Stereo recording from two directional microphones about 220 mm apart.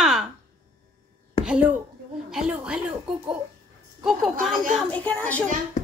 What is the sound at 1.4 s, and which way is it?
A woman's voice, 5° right (ahead or behind).